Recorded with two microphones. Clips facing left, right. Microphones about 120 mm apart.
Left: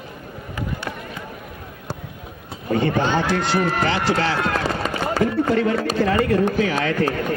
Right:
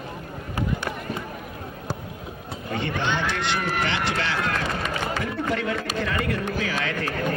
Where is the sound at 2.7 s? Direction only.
40° left (ahead or behind).